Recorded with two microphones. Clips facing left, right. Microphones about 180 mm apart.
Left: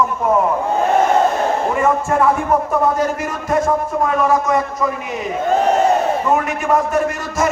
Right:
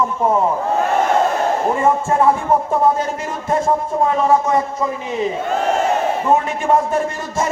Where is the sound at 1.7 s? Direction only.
30° right (ahead or behind).